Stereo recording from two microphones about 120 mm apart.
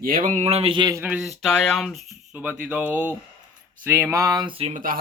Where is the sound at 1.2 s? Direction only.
Centre (ahead or behind).